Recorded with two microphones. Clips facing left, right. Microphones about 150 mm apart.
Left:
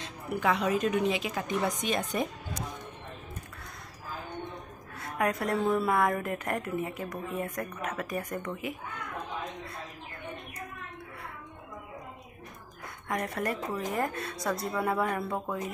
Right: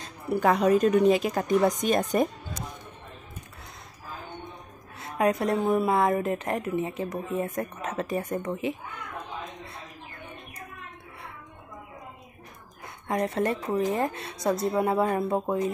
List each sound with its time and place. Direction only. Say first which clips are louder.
0.0 s a woman's voice: right 5 dB; 40° right (ahead or behind)
5.0 s a woman's voice: right 5 dB; 25° right (ahead or behind)
13.1 s a woman's voice: right 6 dB; 25° right (ahead or behind)